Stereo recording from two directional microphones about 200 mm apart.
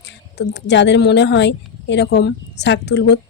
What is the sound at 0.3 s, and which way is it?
A woman's voice, 60° left (ahead or behind).